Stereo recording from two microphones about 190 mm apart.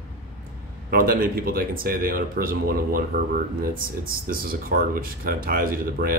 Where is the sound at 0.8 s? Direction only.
50° right (ahead or behind).